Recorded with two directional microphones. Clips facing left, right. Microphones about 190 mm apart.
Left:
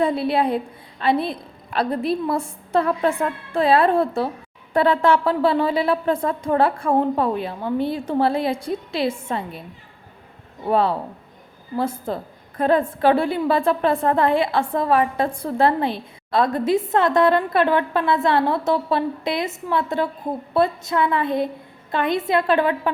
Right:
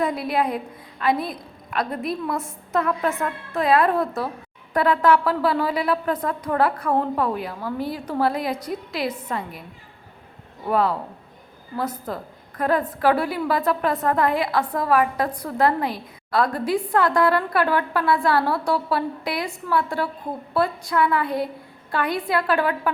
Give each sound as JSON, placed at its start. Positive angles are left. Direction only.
{"t": 0.0, "sound": "a woman's voice", "side_deg": 30}
{"t": 10.7, "sound": "a woman's voice", "side_deg": 25}